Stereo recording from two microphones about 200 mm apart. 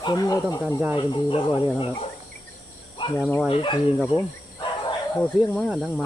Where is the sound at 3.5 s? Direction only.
25° left (ahead or behind).